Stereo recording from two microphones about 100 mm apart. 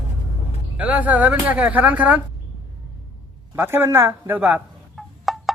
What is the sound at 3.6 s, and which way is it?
Speech, 25° right (ahead or behind).